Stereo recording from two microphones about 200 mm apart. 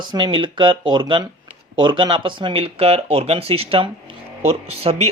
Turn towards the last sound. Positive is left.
turn(degrees=-30)  # may be behind; listen again after turning